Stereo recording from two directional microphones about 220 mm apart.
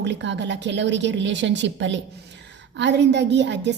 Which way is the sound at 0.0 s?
55° right (ahead or behind).